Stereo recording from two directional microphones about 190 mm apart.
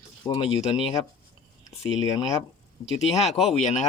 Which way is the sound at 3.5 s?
40° left (ahead or behind).